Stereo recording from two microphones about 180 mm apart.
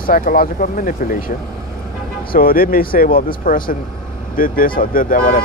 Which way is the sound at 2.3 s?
55° left (ahead or behind).